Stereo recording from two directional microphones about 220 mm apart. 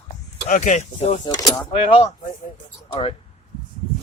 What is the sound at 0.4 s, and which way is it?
Speech, 35° left (ahead or behind).